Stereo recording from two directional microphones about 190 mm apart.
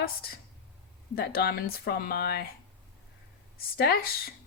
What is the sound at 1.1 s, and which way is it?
A woman's voice, 55° left (ahead or behind).